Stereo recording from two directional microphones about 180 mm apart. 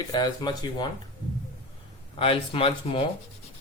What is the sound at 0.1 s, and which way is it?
Speech, 25° left (ahead or behind).